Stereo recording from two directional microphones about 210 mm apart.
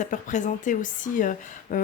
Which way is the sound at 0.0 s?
35° left (ahead or behind).